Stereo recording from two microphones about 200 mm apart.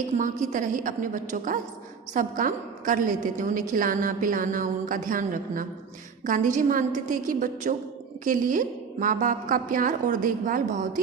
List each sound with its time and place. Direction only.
0.2 s a woman's voice: 40° right (ahead or behind)